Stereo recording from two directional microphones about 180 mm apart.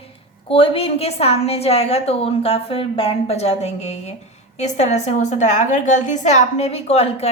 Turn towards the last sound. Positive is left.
turn(degrees=35)  # may be behind; listen again after turning